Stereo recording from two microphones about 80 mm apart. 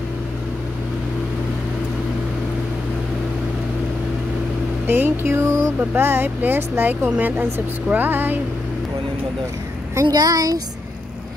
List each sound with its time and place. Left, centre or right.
4.8 s speech: right
10.1 s speech: right